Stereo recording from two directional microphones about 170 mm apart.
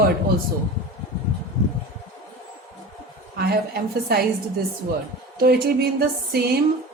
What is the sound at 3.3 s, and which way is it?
Speech, 65° right (ahead or behind).